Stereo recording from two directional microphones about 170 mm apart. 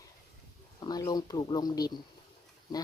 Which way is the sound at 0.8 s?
25° left (ahead or behind).